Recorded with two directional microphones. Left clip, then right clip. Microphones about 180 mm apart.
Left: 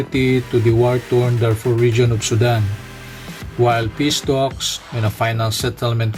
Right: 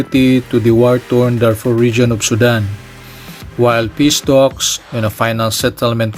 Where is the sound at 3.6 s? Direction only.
45° right (ahead or behind).